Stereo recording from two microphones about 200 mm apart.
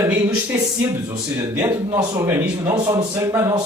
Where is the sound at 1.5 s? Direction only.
15° right (ahead or behind).